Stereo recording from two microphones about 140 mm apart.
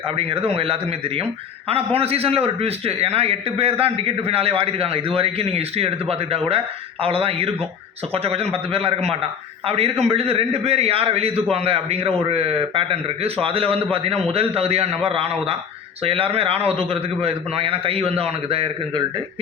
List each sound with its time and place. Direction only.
0.2 s a man's voice: 45° right (ahead or behind)